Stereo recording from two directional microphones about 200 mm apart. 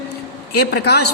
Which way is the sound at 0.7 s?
55° left (ahead or behind).